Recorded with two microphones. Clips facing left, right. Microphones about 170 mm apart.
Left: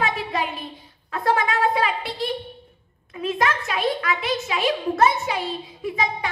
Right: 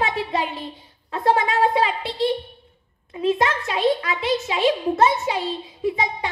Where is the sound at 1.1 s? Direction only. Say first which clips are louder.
Right 2 dB; 25° right (ahead or behind).